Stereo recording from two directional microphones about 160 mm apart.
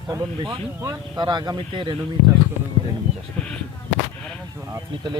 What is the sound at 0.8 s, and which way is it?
Speech, 20° right (ahead or behind).